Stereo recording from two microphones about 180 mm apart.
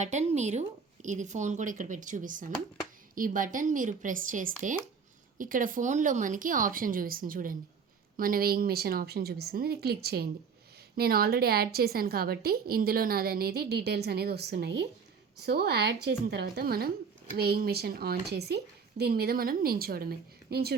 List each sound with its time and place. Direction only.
0.0 s a woman's voice: 40° right (ahead or behind); by 20.7 s 60° right (ahead or behind)